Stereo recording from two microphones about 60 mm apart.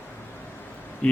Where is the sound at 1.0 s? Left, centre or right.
Centre.